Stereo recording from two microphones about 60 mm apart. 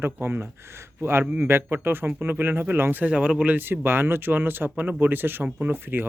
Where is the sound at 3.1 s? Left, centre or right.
Right.